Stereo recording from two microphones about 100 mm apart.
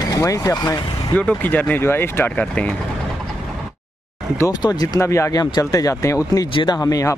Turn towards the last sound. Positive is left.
turn(degrees=30)  # may be behind; listen again after turning